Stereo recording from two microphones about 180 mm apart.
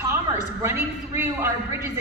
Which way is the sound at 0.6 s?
15° right (ahead or behind).